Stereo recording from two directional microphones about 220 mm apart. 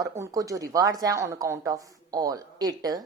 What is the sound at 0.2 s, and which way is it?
Speech, 15° right (ahead or behind).